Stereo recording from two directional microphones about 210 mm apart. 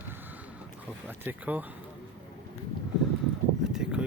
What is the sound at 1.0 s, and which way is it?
Speech, 10° right (ahead or behind).